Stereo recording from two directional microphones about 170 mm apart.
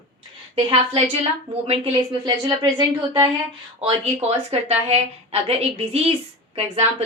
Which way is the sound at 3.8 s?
35° right (ahead or behind).